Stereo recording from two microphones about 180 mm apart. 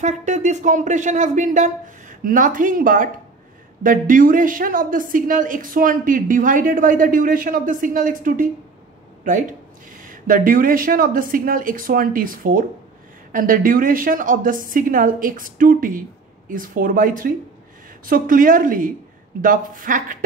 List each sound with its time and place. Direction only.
0.0 s a woman's voice: 40° right (ahead or behind)